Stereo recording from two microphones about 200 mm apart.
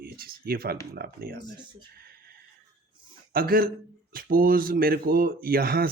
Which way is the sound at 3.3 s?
45° right (ahead or behind).